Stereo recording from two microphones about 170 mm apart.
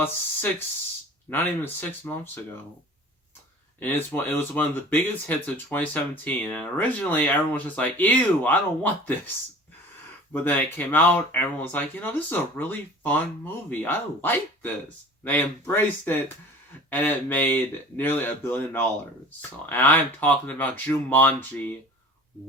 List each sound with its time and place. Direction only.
1.3 s speech: 10° left (ahead or behind)
3.8 s speech: 10° left (ahead or behind)
10.3 s speech: 10° left (ahead or behind)